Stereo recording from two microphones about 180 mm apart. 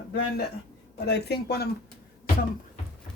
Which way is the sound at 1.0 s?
65° left (ahead or behind).